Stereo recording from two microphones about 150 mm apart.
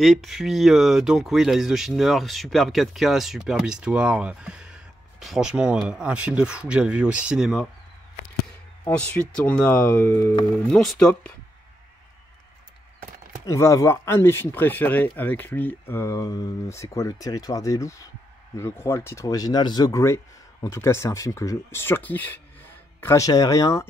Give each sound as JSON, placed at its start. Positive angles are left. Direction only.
{"t": 0.0, "sound": "speech", "side_deg": 0}
{"t": 8.8, "sound": "speech", "side_deg": 10}
{"t": 10.7, "sound": "speech", "side_deg": 5}
{"t": 13.5, "sound": "speech", "side_deg": 20}